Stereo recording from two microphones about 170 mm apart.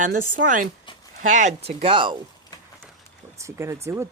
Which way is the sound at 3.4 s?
15° right (ahead or behind).